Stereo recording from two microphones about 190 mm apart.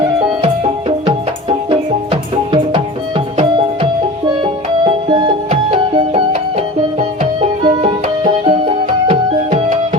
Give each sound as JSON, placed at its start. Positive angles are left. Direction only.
{"t": 0.4, "sound": "music", "side_deg": -30}
{"t": 4.9, "sound": "music", "side_deg": -25}
{"t": 7.6, "sound": "music", "side_deg": -25}